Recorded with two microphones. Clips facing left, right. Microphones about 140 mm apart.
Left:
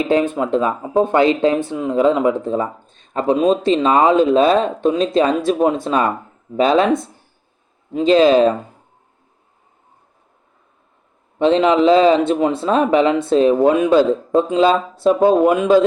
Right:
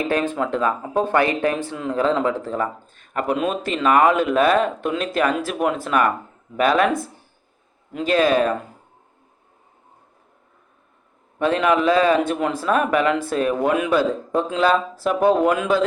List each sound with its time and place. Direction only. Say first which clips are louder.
0.0 s speech: left 5 dB; 20° left (ahead or behind)
11.3 s speech: left 5 dB; 25° left (ahead or behind)